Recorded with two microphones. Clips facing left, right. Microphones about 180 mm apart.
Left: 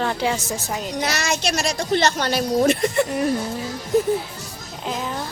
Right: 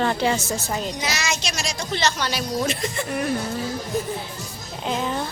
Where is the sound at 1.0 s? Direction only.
60° left (ahead or behind).